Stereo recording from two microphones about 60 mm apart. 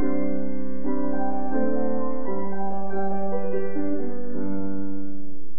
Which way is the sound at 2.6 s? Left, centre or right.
Right.